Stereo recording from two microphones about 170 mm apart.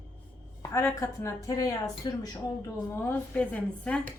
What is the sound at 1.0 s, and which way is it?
Speech, 20° left (ahead or behind).